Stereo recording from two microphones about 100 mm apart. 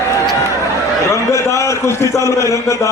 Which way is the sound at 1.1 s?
30° left (ahead or behind).